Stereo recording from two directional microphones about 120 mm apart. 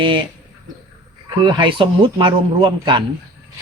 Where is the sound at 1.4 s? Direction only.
40° right (ahead or behind).